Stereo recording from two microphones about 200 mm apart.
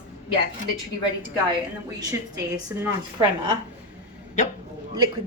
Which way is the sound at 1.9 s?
15° right (ahead or behind).